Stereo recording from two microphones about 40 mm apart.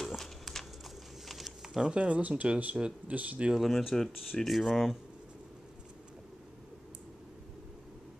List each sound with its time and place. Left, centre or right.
0.1 s horse: centre
1.2 s a sound: centre
1.8 s speech: right
3.5 s speech: centre